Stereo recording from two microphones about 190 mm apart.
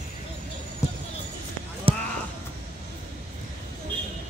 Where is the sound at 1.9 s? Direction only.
30° right (ahead or behind).